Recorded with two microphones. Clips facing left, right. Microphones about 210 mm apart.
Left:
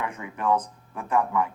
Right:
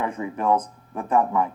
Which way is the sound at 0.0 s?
30° right (ahead or behind).